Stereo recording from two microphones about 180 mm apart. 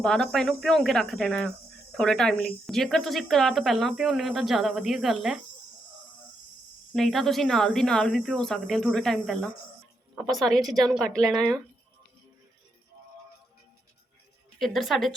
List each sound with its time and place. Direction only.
0.0 s speech: centre (ahead or behind)
6.9 s speech: centre (ahead or behind)
14.6 s speech: centre (ahead or behind)